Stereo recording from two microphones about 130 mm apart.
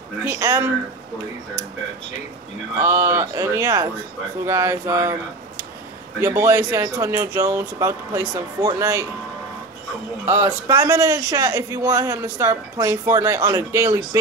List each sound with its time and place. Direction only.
0.2 s speech: 20° right (ahead or behind)
2.8 s speech: 20° right (ahead or behind)
6.2 s speech: 20° right (ahead or behind)
10.2 s speech: 20° right (ahead or behind)